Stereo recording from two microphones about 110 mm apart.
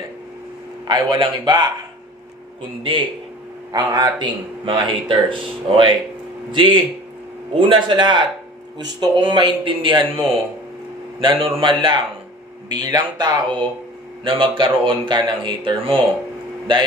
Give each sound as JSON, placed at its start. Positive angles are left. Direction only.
{"t": 0.8, "sound": "speech", "side_deg": -45}
{"t": 3.7, "sound": "speech", "side_deg": -40}